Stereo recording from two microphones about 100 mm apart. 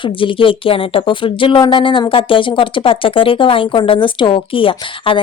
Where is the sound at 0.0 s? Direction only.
60° left (ahead or behind).